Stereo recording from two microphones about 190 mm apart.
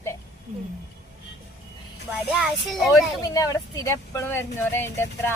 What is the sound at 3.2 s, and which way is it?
A woman's voice, 20° left (ahead or behind).